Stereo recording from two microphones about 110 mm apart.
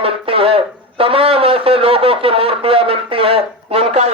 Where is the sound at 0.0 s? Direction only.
60° right (ahead or behind).